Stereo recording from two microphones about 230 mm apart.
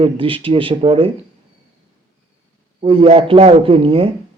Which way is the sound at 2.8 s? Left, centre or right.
Right.